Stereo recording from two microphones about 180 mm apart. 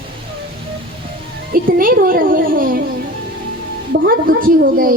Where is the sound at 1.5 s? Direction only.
50° right (ahead or behind).